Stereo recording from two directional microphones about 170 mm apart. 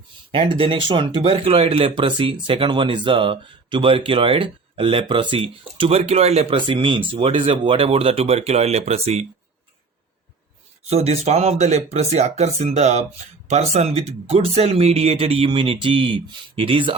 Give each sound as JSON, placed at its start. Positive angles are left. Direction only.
{"t": 0.3, "sound": "speech", "side_deg": -30}
{"t": 10.8, "sound": "speech", "side_deg": -35}